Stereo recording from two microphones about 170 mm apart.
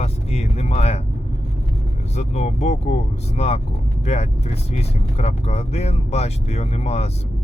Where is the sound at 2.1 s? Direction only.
40° left (ahead or behind).